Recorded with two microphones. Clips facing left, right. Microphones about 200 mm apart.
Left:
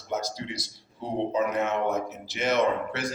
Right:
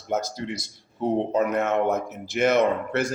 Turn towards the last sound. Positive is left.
turn(degrees=-50)  # may be behind; listen again after turning